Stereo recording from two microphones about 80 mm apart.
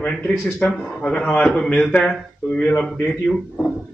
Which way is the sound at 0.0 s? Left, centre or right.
Centre.